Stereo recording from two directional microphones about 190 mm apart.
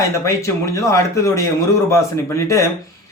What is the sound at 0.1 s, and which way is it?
A man's voice, 15° left (ahead or behind).